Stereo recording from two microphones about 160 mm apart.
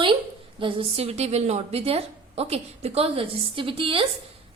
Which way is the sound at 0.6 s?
35° right (ahead or behind).